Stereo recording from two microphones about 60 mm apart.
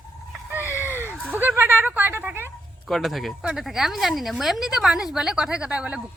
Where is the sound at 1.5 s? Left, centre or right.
Right.